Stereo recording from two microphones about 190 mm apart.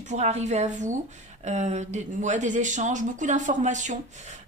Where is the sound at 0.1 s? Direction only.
35° right (ahead or behind).